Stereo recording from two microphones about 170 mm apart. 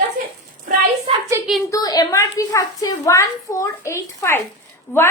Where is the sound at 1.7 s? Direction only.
20° left (ahead or behind).